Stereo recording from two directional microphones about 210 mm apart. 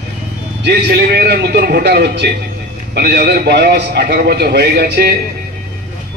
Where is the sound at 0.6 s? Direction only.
50° right (ahead or behind).